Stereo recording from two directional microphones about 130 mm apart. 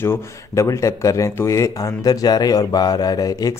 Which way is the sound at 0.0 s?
20° left (ahead or behind).